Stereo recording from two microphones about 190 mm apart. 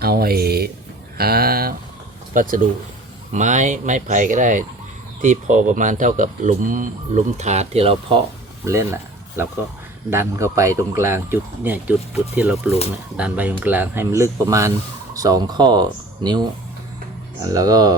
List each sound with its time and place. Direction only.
0.0 s speech: 55° right (ahead or behind); by 8.2 s 30° right (ahead or behind)
8.6 s speech: 15° right (ahead or behind)